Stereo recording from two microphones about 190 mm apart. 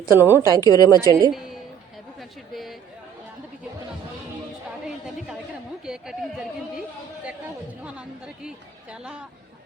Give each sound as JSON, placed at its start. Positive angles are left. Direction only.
{"t": 0.1, "sound": "a woman's voice", "side_deg": -10}
{"t": 0.5, "sound": "a woman's voice", "side_deg": 20}
{"t": 1.0, "sound": "a woman's voice", "side_deg": -15}
{"t": 1.3, "sound": "a woman's voice", "side_deg": 0}
{"t": 5.8, "sound": "chatter", "side_deg": -5}
{"t": 7.9, "sound": "a woman's voice", "side_deg": -5}